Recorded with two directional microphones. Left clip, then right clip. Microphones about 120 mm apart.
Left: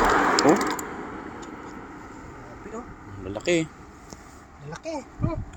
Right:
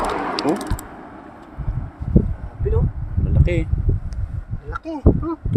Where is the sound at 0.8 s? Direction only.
40° right (ahead or behind).